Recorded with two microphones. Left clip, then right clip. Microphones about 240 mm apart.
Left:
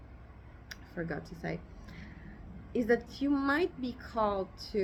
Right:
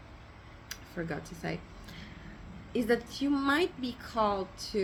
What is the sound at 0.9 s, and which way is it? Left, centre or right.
Speech, centre.